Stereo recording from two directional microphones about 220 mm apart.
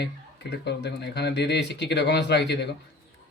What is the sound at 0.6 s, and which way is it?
Speech, 50° left (ahead or behind).